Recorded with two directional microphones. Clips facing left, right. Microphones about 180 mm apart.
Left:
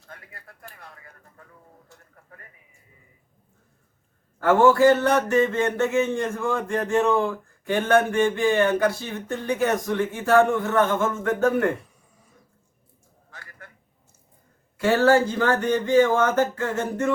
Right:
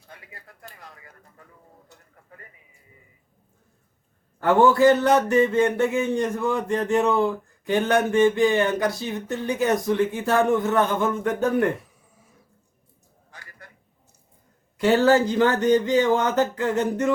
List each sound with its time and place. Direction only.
4.4 s a man's voice: 15° right (ahead or behind)
11.8 s a sound: 5° right (ahead or behind)
14.8 s a man's voice: 20° right (ahead or behind)